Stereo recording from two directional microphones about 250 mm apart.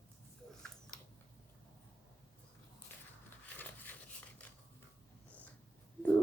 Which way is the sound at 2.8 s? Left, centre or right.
Centre.